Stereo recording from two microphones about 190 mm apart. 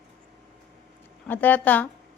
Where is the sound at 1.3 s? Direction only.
10° left (ahead or behind).